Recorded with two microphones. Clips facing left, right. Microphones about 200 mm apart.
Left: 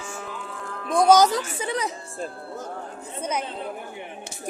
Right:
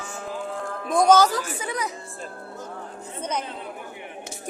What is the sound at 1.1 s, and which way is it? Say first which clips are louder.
Speech: left 2 dB; 20° left (ahead or behind).